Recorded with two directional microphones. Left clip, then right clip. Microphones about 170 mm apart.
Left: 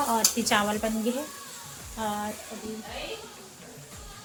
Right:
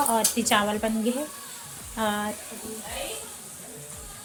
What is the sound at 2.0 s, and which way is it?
Speech, 25° right (ahead or behind).